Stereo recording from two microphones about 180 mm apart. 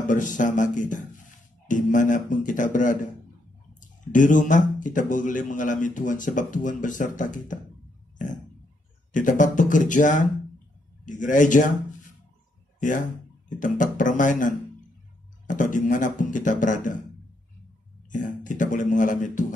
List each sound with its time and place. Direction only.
0.1 s speech: 45° left (ahead or behind)
4.1 s speech: 45° left (ahead or behind)
9.1 s speech: 45° left (ahead or behind)
13.5 s speech: 45° left (ahead or behind)
18.1 s speech: 45° left (ahead or behind)